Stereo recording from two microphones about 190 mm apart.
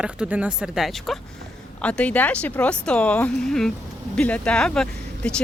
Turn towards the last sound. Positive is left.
turn(degrees=5)  # may be behind; listen again after turning